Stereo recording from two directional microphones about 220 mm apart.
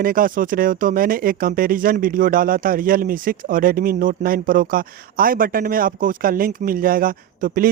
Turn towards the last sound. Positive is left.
turn(degrees=-40)  # may be behind; listen again after turning